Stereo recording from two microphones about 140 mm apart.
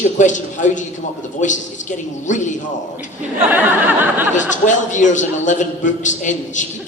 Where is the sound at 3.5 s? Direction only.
15° right (ahead or behind).